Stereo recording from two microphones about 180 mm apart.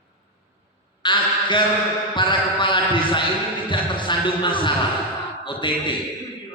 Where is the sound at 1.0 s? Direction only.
25° left (ahead or behind).